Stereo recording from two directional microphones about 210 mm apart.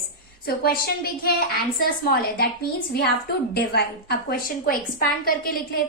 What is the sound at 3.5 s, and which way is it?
A woman's voice, 50° left (ahead or behind).